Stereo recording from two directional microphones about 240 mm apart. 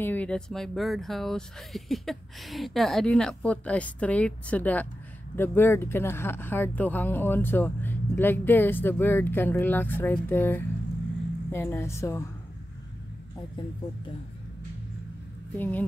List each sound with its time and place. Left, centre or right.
0.0 s speech: centre
13.6 s speech: centre
15.5 s speech: centre